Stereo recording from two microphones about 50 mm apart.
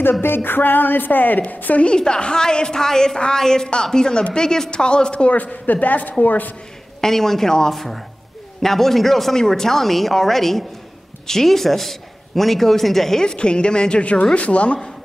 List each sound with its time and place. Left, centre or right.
0.2 s a woman's voice: left
1.9 s a woman's voice: centre; by 6.5 s left
7.0 s a woman's voice: centre
13.2 s a woman's voice: centre